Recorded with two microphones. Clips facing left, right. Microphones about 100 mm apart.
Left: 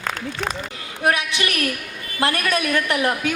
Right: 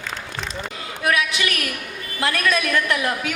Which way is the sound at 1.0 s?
30° left (ahead or behind).